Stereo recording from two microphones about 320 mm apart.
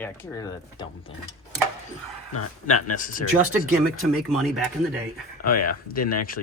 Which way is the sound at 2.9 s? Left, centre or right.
Left.